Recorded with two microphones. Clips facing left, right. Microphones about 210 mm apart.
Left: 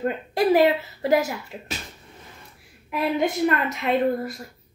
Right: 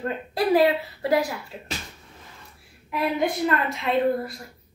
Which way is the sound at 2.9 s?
20° left (ahead or behind).